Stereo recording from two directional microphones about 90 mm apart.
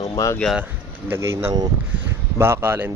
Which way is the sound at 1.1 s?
30° right (ahead or behind).